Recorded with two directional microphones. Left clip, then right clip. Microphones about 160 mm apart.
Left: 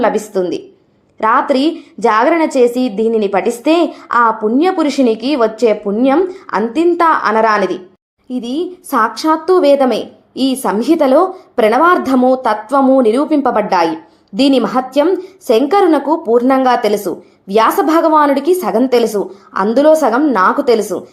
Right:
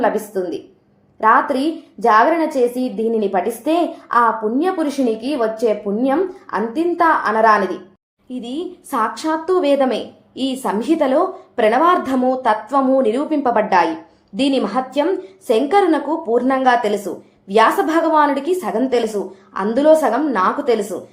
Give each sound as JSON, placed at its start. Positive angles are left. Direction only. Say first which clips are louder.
{"t": 0.0, "sound": "a woman's voice", "louder": "left 5 dB", "side_deg": 30}